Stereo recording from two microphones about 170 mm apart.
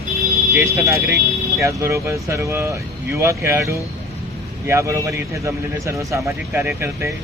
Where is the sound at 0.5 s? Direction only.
15° right (ahead or behind).